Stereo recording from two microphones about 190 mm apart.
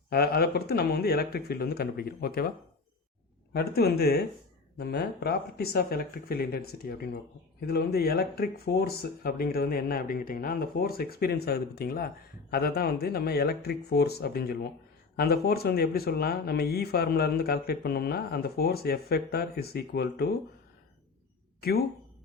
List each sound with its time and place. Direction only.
0.1 s speech: 55° left (ahead or behind)
3.5 s speech: 55° left (ahead or behind)